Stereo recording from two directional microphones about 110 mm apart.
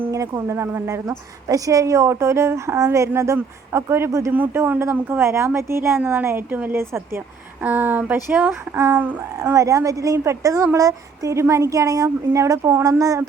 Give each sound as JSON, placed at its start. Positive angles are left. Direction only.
{"t": 0.3, "sound": "a woman's voice", "side_deg": -25}
{"t": 9.1, "sound": "a woman's voice", "side_deg": -35}